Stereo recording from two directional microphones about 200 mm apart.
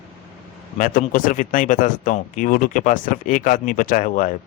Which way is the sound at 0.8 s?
40° left (ahead or behind).